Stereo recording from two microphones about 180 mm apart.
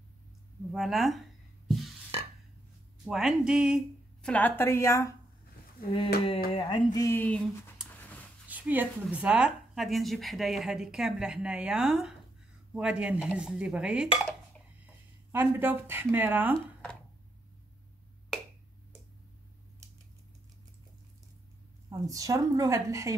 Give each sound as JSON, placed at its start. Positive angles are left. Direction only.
{"t": 0.7, "sound": "a sound", "side_deg": 0}
{"t": 3.1, "sound": "speech", "side_deg": 0}
{"t": 4.3, "sound": "speech", "side_deg": 10}
{"t": 6.5, "sound": "speech", "side_deg": 25}
{"t": 7.9, "sound": "a sound", "side_deg": 10}
{"t": 8.5, "sound": "speech", "side_deg": -10}
{"t": 15.3, "sound": "speech", "side_deg": -10}
{"t": 21.8, "sound": "a woman's voice", "side_deg": -20}